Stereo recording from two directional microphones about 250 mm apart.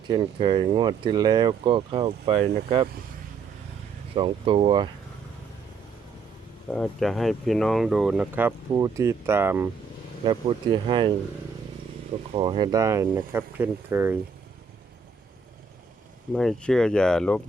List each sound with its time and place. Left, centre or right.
0.1 s speech: centre
4.1 s speech: right
6.7 s speech: centre
12.3 s speech: centre
16.3 s speech: centre